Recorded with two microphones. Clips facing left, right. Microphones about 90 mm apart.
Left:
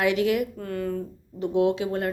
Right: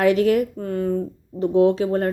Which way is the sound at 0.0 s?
40° right (ahead or behind).